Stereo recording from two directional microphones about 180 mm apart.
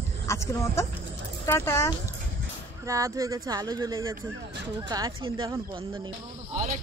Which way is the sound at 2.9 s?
20° right (ahead or behind).